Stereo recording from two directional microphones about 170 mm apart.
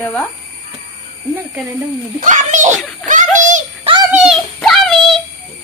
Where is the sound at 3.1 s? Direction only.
50° right (ahead or behind).